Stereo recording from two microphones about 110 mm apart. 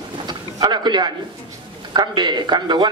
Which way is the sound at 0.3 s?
40° right (ahead or behind).